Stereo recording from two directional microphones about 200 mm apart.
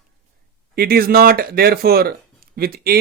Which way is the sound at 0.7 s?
50° right (ahead or behind).